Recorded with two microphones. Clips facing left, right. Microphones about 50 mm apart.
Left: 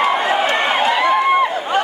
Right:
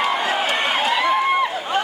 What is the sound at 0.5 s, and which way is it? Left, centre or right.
Run, centre.